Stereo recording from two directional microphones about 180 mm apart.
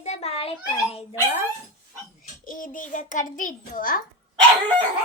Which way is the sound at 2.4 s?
50° left (ahead or behind).